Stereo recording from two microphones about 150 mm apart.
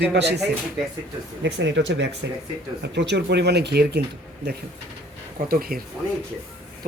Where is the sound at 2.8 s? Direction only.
90° right.